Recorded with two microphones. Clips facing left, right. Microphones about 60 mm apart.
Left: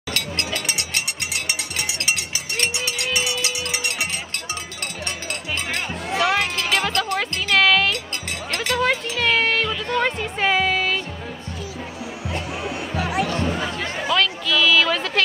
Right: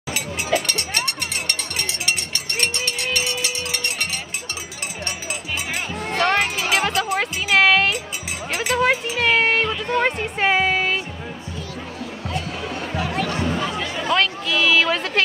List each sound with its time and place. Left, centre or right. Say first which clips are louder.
0.1 s a sound: right 4 dB; centre
0.7 s cowbell: right 2 dB; centre
2.6 s music: even; centre
6.0 s music: right 1 dB; centre
12.6 s music: left 1 dB; centre
14.1 s a sound: even; centre